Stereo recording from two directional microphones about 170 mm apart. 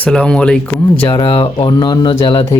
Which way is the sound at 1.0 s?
25° left (ahead or behind).